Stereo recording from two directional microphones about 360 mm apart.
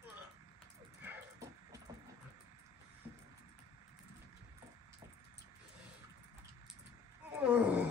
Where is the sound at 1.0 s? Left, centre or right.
Centre.